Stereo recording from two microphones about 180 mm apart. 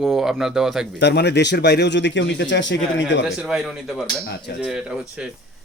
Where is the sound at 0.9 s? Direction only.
70° left (ahead or behind).